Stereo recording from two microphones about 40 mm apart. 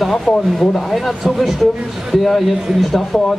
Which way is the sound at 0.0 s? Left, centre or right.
Centre.